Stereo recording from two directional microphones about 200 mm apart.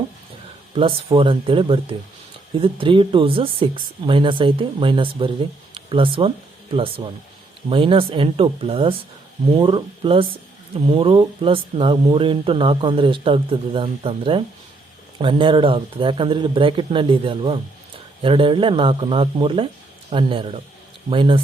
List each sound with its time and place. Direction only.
0.7 s speech: 25° right (ahead or behind)